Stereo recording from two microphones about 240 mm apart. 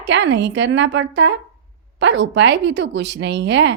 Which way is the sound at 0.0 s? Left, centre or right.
Right.